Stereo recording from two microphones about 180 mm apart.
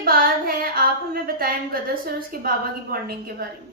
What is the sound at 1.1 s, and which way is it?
A woman's voice, 55° right (ahead or behind).